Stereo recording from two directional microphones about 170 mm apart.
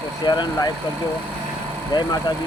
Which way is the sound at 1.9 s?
25° left (ahead or behind).